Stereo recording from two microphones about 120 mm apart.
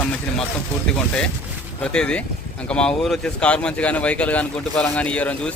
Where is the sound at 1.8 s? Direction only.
10° left (ahead or behind).